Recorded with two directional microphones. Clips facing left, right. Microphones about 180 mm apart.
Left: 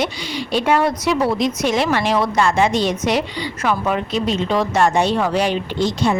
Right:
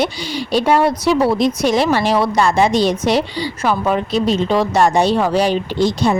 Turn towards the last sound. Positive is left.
turn(degrees=-35)  # may be behind; listen again after turning